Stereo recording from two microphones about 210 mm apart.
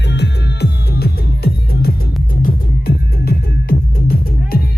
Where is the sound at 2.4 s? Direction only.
45° left (ahead or behind).